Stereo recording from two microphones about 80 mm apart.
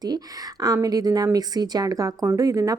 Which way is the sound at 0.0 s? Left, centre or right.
Right.